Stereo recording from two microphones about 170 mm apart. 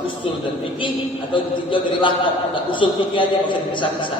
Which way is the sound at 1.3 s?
30° left (ahead or behind).